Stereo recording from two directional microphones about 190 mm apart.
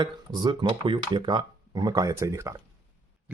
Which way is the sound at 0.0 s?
20° right (ahead or behind).